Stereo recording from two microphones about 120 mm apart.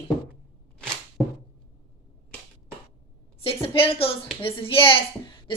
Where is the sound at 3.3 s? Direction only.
50° left (ahead or behind).